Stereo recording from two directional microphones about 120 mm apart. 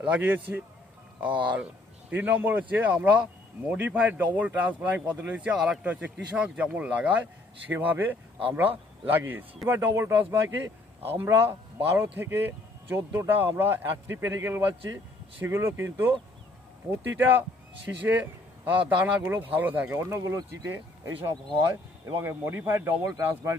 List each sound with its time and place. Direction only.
0.0 s a man's voice: 10° right (ahead or behind)
1.3 s speech: 40° right (ahead or behind)
2.0 s a man's voice: 15° right (ahead or behind)